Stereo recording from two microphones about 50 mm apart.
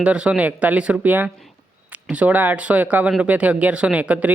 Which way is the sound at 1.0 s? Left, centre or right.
Right.